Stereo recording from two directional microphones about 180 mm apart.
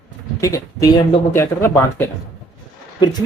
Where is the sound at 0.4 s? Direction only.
20° left (ahead or behind).